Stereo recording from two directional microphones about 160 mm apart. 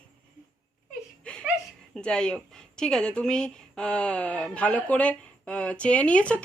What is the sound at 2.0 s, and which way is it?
Speech, 5° left (ahead or behind).